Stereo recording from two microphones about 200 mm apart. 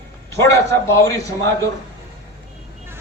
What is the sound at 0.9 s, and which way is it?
Speech, 15° left (ahead or behind).